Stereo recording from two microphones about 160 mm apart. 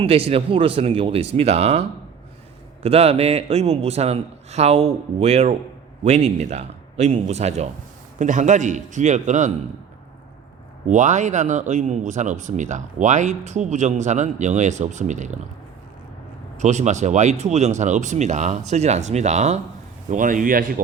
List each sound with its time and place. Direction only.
0.0 s a man's voice: 35° right (ahead or behind)
2.8 s a man's voice: 40° right (ahead or behind)
10.8 s speech: 50° right (ahead or behind)
16.6 s a man's voice: 45° right (ahead or behind); by 20.8 s 60° right (ahead or behind)